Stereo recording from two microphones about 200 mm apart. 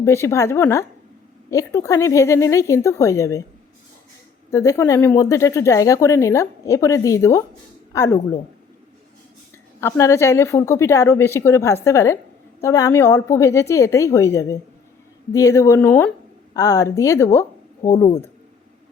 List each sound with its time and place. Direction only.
0.0 s speech: 15° left (ahead or behind)
4.5 s speech: 15° left (ahead or behind)
9.8 s speech: 15° left (ahead or behind)